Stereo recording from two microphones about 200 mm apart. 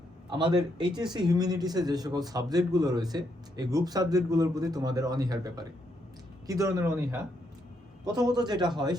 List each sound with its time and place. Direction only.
0.3 s a man's voice: 25° right (ahead or behind)